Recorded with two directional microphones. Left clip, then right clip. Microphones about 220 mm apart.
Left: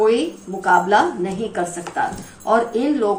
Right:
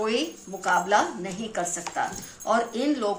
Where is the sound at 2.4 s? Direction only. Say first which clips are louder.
Left 7 dB; 45° right (ahead or behind).